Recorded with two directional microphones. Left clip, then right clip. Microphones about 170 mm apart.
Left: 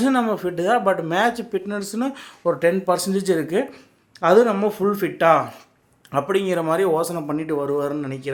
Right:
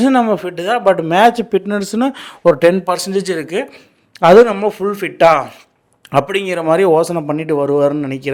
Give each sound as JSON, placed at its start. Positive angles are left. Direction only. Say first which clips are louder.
{"t": 0.0, "sound": "speech", "louder": "right 7 dB", "side_deg": -35}